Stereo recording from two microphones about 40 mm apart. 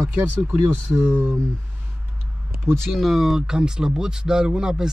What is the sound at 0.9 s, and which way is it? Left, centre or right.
Speech, right.